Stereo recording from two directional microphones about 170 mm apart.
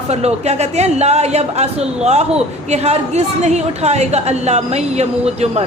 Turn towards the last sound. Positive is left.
turn(degrees=-40)  # may be behind; listen again after turning